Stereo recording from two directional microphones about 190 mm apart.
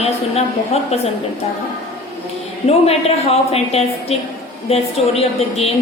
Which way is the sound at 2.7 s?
30° left (ahead or behind).